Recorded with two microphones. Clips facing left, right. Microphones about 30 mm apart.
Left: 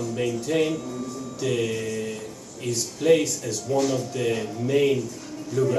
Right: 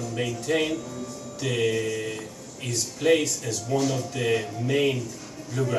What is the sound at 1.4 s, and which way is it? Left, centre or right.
Music, centre.